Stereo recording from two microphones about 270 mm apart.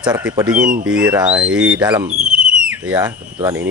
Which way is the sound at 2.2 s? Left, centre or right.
Centre.